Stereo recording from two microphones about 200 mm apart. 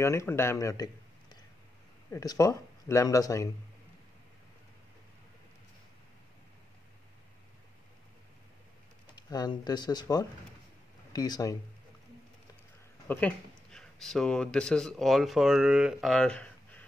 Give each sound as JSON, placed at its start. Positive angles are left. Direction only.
{"t": 0.0, "sound": "speech", "side_deg": 15}
{"t": 2.0, "sound": "speech", "side_deg": 15}
{"t": 9.0, "sound": "speech", "side_deg": 20}
{"t": 13.1, "sound": "speech", "side_deg": 5}